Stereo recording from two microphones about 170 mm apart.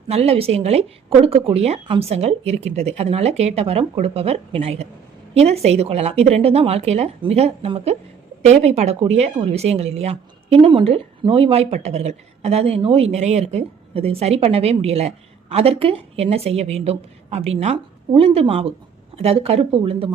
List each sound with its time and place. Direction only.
0.1 s a woman's voice: 35° right (ahead or behind)